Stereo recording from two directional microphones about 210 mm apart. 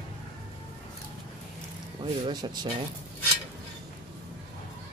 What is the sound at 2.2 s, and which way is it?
Speech, 20° right (ahead or behind).